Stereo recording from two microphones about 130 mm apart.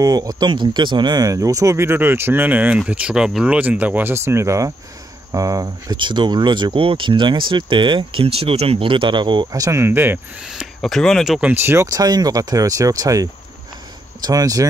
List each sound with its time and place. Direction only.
0.0 s speech: 30° right (ahead or behind)
10.4 s speech: 5° right (ahead or behind)
11.5 s speech: 20° right (ahead or behind)